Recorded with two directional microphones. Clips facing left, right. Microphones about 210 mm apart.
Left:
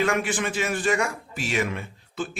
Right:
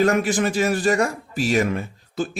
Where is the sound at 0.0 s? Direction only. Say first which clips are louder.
Right 6 dB; 40° right (ahead or behind).